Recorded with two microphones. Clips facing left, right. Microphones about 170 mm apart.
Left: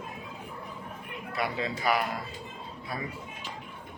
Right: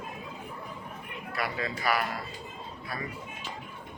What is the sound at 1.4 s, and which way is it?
Speech, 20° left (ahead or behind).